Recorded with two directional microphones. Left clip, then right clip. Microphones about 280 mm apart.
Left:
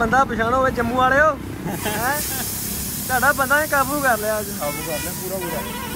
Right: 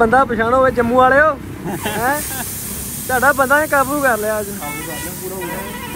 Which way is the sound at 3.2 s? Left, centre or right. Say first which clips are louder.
Right 4 dB; centre.